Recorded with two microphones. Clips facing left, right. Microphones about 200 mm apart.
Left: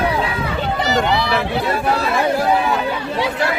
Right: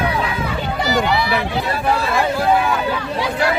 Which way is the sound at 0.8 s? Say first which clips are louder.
Even; 25° left (ahead or behind).